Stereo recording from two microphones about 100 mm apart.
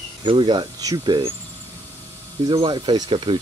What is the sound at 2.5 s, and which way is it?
Speech, 55° right (ahead or behind).